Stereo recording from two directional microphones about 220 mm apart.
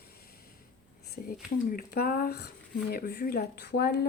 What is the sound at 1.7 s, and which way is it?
A woman's voice, 40° left (ahead or behind).